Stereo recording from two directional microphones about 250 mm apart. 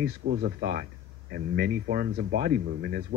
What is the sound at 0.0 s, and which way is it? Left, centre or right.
Speech, right.